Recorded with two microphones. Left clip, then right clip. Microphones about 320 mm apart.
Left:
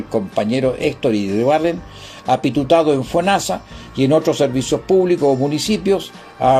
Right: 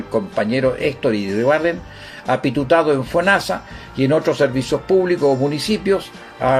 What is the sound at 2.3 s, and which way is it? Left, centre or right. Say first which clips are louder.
Speech: left 2 dB; left.